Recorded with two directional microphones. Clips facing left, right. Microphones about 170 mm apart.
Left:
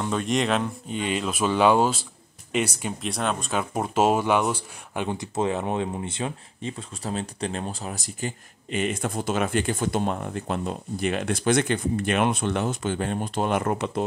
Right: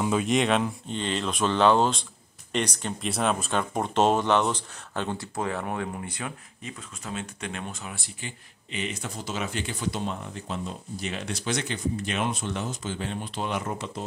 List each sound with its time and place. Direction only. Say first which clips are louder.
0.0 s speech: right 1 dB; 5° right (ahead or behind)
3.1 s speech: right 1 dB; centre (ahead or behind); by 14.0 s 60° left (ahead or behind)